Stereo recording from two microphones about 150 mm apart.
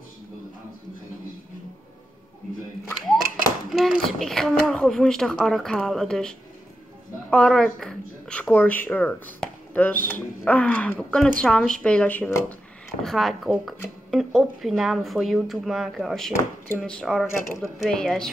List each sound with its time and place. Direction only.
3.7 s speech: centre (ahead or behind)
13.0 s speech: centre (ahead or behind)